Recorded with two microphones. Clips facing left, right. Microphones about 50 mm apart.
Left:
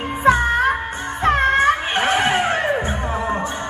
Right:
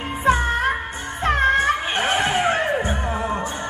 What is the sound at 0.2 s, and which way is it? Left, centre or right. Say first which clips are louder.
Music: left 4 dB; left.